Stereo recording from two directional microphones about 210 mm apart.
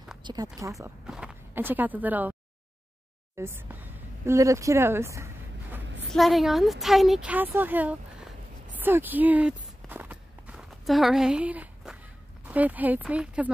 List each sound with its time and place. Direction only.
0.2 s speech: 20° right (ahead or behind)
1.0 s speech: 5° right (ahead or behind)
3.3 s speech: 10° right (ahead or behind)
6.1 s a woman's voice: centre (ahead or behind)
8.7 s walk: 10° right (ahead or behind)
12.4 s speech: 5° right (ahead or behind)